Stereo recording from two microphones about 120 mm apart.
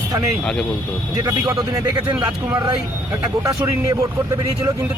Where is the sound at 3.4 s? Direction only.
30° right (ahead or behind).